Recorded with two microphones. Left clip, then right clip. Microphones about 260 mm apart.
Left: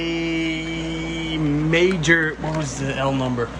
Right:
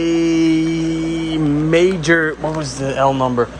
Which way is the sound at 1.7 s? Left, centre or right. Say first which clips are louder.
Right 4 dB; right.